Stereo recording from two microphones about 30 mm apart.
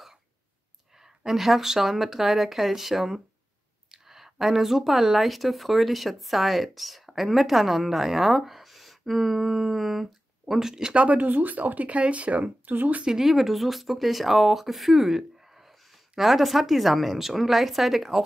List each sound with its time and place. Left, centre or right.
0.9 s speech: centre
10.5 s speech: centre
10.9 s speech: right
11.1 s speech: right
12.6 s speech: right
13.2 s speech: centre